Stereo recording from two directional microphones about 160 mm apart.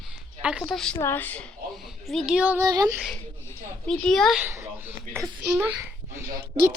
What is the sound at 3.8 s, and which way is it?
Speech, centre (ahead or behind).